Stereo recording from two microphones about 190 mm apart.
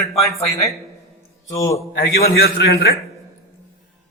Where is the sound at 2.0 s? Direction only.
55° left (ahead or behind).